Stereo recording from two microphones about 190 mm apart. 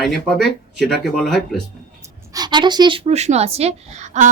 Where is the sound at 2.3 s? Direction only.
20° right (ahead or behind); by 4.3 s 40° right (ahead or behind).